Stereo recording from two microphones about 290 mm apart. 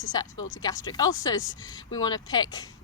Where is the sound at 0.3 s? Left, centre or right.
Left.